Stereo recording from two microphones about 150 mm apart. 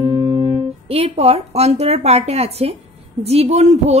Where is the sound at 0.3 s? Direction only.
40° right (ahead or behind).